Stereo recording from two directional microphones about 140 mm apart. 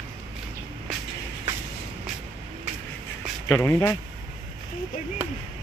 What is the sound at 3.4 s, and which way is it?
Speech, 20° left (ahead or behind).